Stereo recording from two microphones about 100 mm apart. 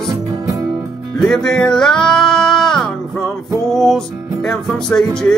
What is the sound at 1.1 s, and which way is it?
Music, 5° left (ahead or behind).